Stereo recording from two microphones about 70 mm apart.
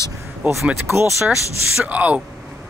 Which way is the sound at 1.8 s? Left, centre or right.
Right.